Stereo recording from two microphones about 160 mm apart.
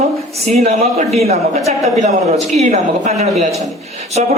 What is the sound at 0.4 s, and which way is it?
A man's voice, 40° right (ahead or behind).